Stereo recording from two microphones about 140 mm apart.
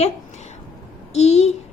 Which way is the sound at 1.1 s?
50° left (ahead or behind).